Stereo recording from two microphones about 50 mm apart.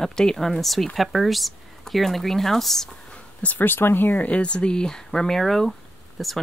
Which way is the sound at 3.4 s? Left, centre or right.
Left.